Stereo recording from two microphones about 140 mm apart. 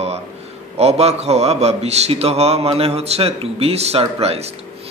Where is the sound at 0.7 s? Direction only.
50° right (ahead or behind).